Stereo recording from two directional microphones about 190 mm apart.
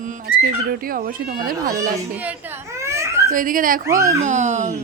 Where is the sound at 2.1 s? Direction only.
10° right (ahead or behind).